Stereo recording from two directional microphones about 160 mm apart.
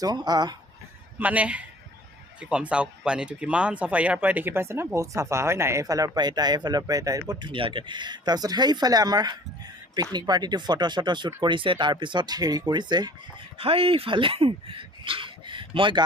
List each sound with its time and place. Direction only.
0.0 s speech: 25° right (ahead or behind)
1.2 s a man's voice: 10° right (ahead or behind); by 16.0 s 30° right (ahead or behind)